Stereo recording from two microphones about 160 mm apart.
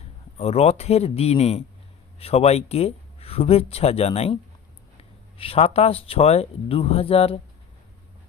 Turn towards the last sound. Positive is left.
turn(degrees=35)  # may be behind; listen again after turning